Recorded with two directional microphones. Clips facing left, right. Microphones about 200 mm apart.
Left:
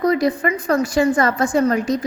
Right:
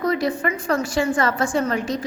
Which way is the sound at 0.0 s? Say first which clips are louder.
Left 4 dB; 40° left (ahead or behind).